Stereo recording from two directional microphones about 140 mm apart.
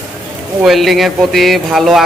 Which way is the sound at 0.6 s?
Centre (ahead or behind).